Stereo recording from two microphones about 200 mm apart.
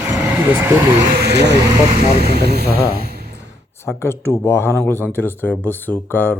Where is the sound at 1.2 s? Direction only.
55° right (ahead or behind).